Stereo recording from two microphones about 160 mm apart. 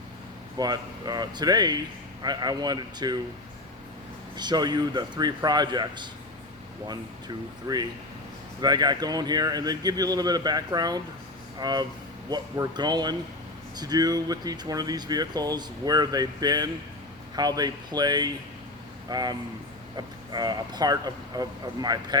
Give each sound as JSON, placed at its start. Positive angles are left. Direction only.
{"t": 0.5, "sound": "speech", "side_deg": -25}
{"t": 4.4, "sound": "speech", "side_deg": -25}
{"t": 7.7, "sound": "speech", "side_deg": -25}